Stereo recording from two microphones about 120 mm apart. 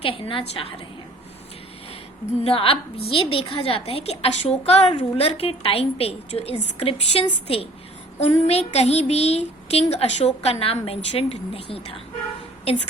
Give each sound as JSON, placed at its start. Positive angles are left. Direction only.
{"t": 0.0, "sound": "a woman's voice", "side_deg": 50}
{"t": 2.4, "sound": "a woman's voice", "side_deg": 50}